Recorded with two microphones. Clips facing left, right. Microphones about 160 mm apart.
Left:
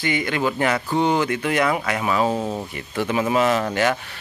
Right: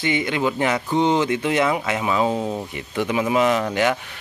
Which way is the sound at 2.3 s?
10° left (ahead or behind).